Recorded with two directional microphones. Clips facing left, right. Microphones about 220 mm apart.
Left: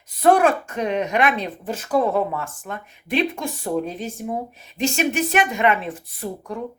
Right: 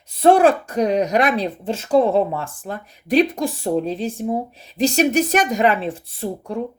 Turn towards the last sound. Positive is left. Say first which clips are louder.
# right 3 dB
turn(degrees=-30)  # may be behind; listen again after turning